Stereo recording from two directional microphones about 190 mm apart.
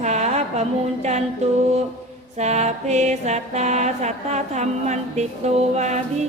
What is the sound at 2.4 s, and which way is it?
Mantra, 35° right (ahead or behind).